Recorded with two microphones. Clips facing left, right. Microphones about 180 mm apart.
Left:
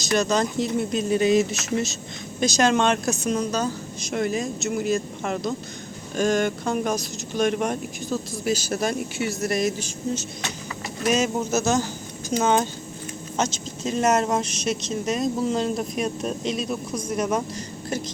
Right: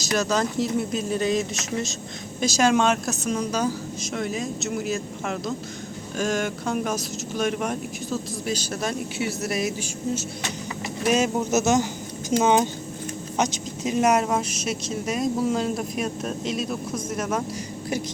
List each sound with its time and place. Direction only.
0.0 s speech: 5° right (ahead or behind)
2.4 s speech: 5° right (ahead or behind)
11.5 s speech: 20° right (ahead or behind); by 17.4 s 5° right (ahead or behind)